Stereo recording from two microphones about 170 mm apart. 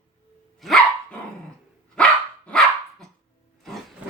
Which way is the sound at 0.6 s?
Centre (ahead or behind).